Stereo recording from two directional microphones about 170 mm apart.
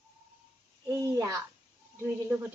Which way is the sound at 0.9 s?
20° right (ahead or behind).